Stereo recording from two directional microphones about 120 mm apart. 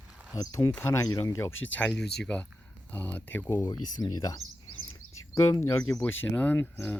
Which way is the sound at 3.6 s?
35° left (ahead or behind).